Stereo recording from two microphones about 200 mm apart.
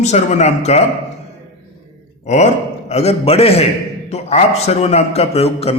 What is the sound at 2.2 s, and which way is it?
A man's voice, 35° left (ahead or behind).